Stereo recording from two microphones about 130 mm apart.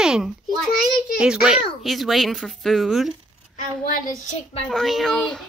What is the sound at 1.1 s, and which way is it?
A child's voice, 5° right (ahead or behind).